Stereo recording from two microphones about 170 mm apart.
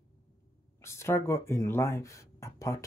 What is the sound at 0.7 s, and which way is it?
Speech, 15° left (ahead or behind).